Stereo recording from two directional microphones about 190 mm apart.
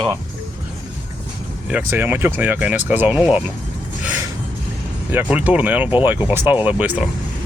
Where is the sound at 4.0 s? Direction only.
10° right (ahead or behind).